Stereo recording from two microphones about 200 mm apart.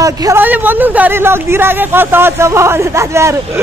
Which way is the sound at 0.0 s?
15° right (ahead or behind).